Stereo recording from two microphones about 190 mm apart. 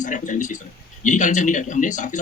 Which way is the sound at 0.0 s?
40° left (ahead or behind).